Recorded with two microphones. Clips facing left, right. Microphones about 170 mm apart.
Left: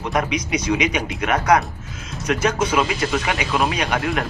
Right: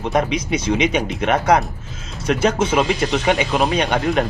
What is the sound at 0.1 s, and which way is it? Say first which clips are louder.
Speech: right 2 dB; 25° right (ahead or behind).